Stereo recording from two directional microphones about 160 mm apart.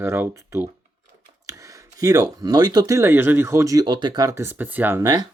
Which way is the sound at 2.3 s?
25° right (ahead or behind).